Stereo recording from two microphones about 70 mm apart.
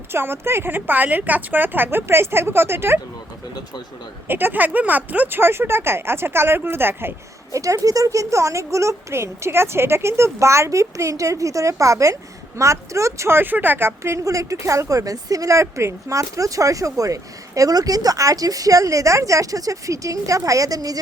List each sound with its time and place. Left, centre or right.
0.1 s a woman's voice: right
4.3 s speech: right
5.4 s a woman's voice: right
7.5 s speech: right